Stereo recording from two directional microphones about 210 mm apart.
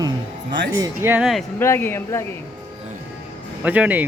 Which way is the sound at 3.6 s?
5° right (ahead or behind).